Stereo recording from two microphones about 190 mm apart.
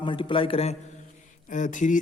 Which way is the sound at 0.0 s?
25° left (ahead or behind).